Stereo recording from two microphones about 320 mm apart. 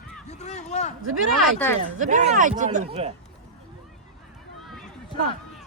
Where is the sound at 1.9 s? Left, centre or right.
Right.